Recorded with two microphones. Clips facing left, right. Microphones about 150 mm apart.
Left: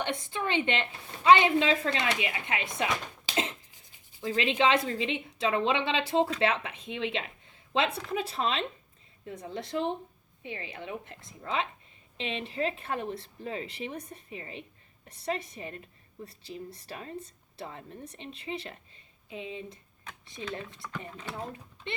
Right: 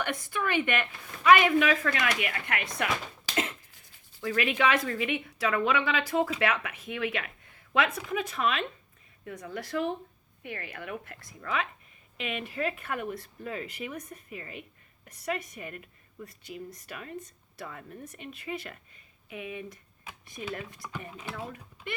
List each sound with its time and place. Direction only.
0.0 s a woman's voice: 25° left (ahead or behind)
21.1 s speech: 10° right (ahead or behind)
21.3 s speech: 25° left (ahead or behind)